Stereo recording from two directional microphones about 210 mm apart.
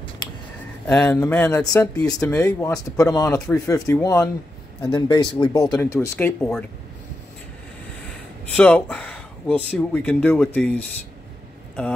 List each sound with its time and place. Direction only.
0.8 s speech: 10° left (ahead or behind)
2.3 s speech: 5° left (ahead or behind)
3.0 s speech: 15° left (ahead or behind)
3.3 s speech: 5° left (ahead or behind)
3.6 s speech: 15° left (ahead or behind)
8.5 s speech: 5° left (ahead or behind)